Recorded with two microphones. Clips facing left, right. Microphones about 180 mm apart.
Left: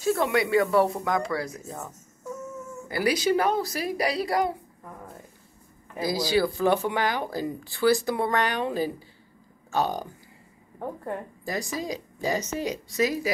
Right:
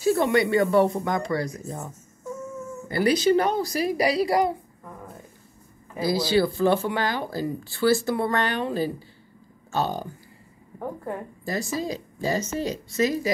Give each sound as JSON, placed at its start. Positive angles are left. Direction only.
{"t": 0.2, "sound": "a woman's voice", "side_deg": 0}
{"t": 2.9, "sound": "a woman's voice", "side_deg": 10}
{"t": 5.9, "sound": "speech", "side_deg": 15}
{"t": 11.4, "sound": "speech", "side_deg": 15}